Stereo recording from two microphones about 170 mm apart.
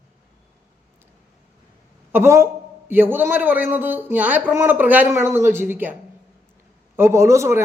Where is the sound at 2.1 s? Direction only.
15° right (ahead or behind).